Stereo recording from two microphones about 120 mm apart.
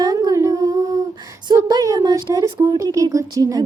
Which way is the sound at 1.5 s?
30° right (ahead or behind).